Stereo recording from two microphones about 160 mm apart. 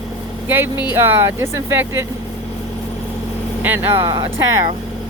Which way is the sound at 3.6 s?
15° right (ahead or behind).